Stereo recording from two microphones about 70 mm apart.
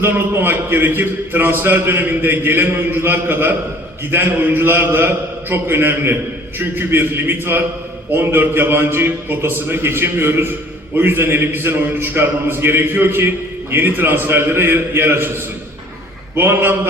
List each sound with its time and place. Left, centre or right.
0.0 s a man's voice: right
16.3 s a man's voice: right